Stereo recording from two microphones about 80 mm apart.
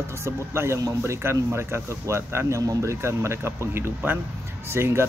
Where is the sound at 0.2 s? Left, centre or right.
Right.